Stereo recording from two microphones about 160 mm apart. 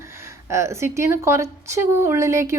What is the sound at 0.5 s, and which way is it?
A woman's voice, 15° right (ahead or behind).